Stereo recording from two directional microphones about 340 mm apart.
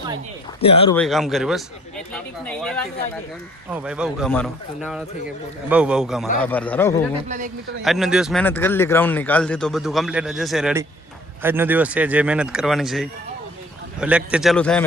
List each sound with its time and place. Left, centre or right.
0.6 s speech: centre
0.9 s speech: centre
7.3 s a man's voice: right
7.9 s speech: centre